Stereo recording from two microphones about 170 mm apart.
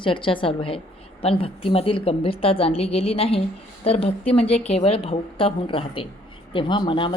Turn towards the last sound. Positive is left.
turn(degrees=30)  # may be behind; listen again after turning